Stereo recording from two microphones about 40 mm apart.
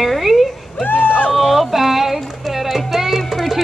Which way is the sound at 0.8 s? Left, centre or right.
Left.